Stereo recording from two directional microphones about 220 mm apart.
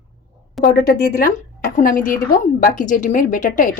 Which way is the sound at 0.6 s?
45° left (ahead or behind).